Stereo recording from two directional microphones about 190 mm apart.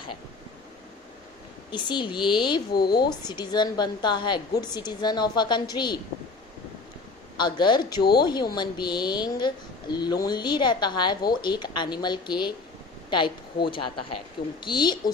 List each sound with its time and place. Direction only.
1.7 s a woman's voice: 25° left (ahead or behind)
7.3 s a woman's voice: 25° left (ahead or behind)